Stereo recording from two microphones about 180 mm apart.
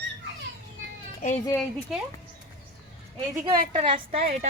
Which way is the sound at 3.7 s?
30° right (ahead or behind).